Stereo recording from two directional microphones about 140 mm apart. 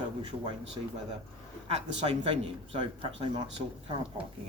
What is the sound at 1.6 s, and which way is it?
Speech, 40° right (ahead or behind).